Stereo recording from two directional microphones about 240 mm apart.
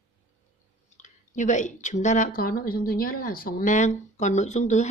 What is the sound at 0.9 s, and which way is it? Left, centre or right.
A woman's voice, left.